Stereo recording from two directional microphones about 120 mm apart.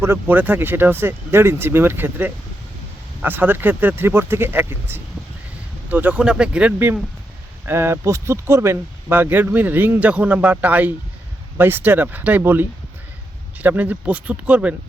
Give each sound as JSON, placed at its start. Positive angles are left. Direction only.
{"t": 0.0, "sound": "speech", "side_deg": -15}